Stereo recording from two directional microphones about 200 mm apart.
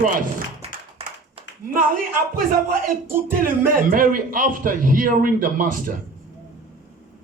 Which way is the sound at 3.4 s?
45° right (ahead or behind).